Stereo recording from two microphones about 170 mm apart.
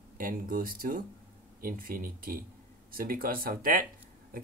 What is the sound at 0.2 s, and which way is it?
Speech, 55° right (ahead or behind).